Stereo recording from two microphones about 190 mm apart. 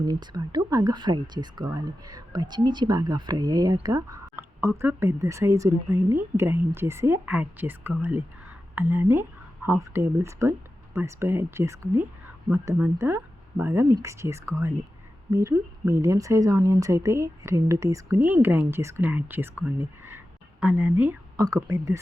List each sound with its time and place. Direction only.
0.0 s a woman's voice: 20° right (ahead or behind)